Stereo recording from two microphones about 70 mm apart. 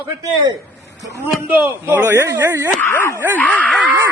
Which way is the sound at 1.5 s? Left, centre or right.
Right.